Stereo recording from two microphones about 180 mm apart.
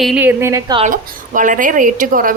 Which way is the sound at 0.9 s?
45° right (ahead or behind).